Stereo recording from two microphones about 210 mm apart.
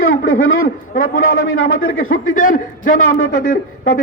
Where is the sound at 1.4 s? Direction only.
75° left (ahead or behind).